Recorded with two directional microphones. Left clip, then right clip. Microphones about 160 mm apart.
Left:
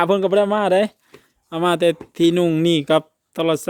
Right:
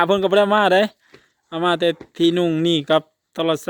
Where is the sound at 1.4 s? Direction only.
5° left (ahead or behind).